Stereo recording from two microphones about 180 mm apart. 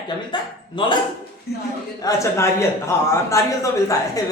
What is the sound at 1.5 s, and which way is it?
Speech, 60° left (ahead or behind).